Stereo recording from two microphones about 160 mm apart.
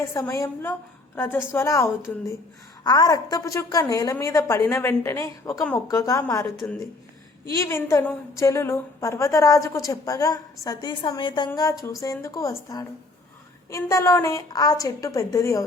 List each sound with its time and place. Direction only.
0.1 s a woman's voice: 20° left (ahead or behind)